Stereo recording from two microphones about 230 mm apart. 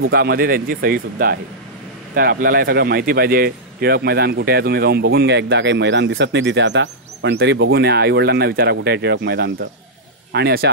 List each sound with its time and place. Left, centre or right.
0.1 s a man's voice: right